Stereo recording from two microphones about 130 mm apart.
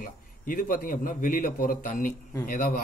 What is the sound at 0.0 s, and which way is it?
A man's voice, 90° left.